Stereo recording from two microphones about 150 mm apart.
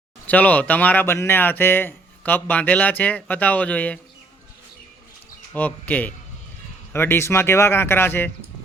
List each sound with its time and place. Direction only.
0.3 s speech: 10° left (ahead or behind)
5.5 s speech: 10° left (ahead or behind)